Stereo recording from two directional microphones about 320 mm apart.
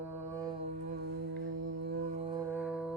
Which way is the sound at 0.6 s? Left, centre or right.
Right.